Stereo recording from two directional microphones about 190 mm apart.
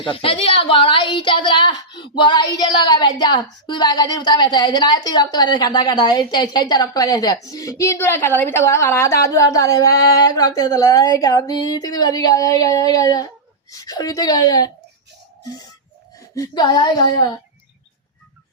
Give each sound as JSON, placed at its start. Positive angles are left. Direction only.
{"t": 0.0, "sound": "a woman's voice", "side_deg": 30}
{"t": 16.3, "sound": "a woman's voice", "side_deg": 20}